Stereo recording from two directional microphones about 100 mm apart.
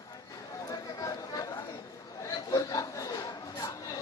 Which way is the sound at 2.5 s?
35° left (ahead or behind).